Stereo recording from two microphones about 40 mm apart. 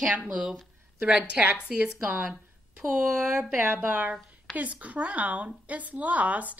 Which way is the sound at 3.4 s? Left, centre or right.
Right.